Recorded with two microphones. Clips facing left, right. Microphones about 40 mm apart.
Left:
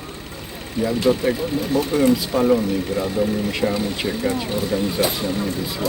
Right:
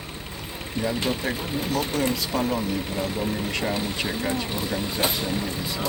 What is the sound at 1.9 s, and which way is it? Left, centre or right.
Speech, centre.